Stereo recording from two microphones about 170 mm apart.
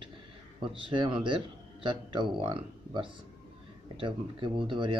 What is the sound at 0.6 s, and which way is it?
Speech, 30° right (ahead or behind).